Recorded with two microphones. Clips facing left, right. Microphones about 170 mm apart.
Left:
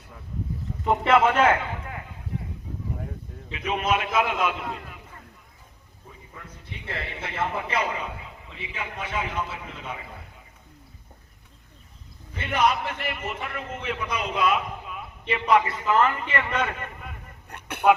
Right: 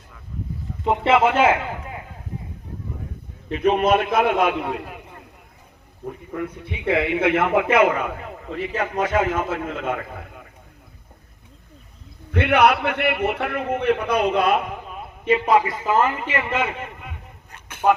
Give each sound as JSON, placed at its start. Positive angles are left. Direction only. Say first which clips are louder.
{"t": 1.0, "sound": "a man's voice", "louder": "right 3 dB", "side_deg": -5}
{"t": 3.6, "sound": "a man's voice", "louder": "right 8 dB", "side_deg": -60}
{"t": 6.1, "sound": "a man's voice", "louder": "right 17 dB", "side_deg": -70}
{"t": 12.3, "sound": "a man's voice", "louder": "right 7 dB", "side_deg": -65}
{"t": 15.3, "sound": "a man's voice", "louder": "right 4 dB", "side_deg": -25}
{"t": 16.0, "sound": "a man's voice", "louder": "right 2 dB", "side_deg": -15}
{"t": 17.5, "sound": "vehicle", "louder": "left 8 dB", "side_deg": 60}